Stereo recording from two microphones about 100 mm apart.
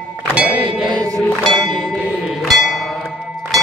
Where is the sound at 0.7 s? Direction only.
50° right (ahead or behind).